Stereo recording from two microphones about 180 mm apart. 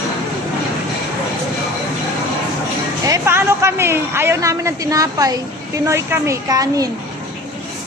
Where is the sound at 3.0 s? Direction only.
15° right (ahead or behind).